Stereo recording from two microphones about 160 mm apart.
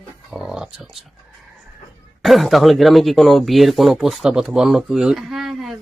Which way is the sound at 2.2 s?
Centre (ahead or behind).